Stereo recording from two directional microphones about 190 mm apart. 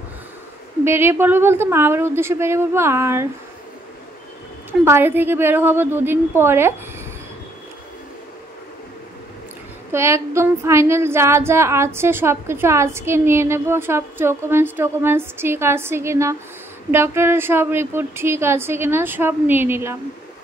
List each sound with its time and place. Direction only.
0.8 s female singing: 10° right (ahead or behind)
4.8 s female singing: 10° right (ahead or behind)
9.9 s female singing: 15° right (ahead or behind)